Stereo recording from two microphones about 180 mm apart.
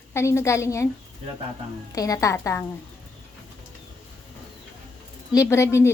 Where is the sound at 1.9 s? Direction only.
20° left (ahead or behind).